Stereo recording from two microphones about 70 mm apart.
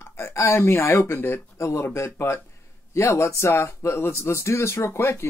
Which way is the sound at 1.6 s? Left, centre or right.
Left.